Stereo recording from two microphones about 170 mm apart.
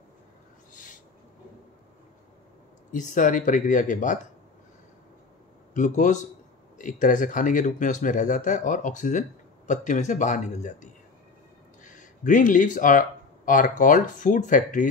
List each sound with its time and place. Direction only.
0.7 s owl: 50° left (ahead or behind)
2.9 s speech: 50° left (ahead or behind)
5.8 s speech: 50° left (ahead or behind)